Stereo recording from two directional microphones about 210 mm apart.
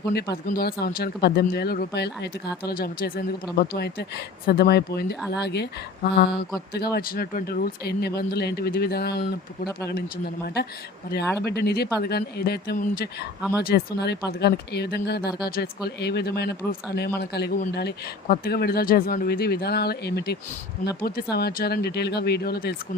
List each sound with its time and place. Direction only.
0.1 s speech: 50° left (ahead or behind)
11.4 s speech: 50° left (ahead or behind)